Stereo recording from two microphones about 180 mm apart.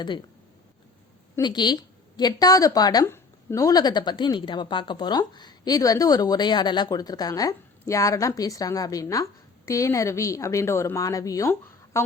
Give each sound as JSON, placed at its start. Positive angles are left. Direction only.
{"t": 1.4, "sound": "a woman's voice", "side_deg": 25}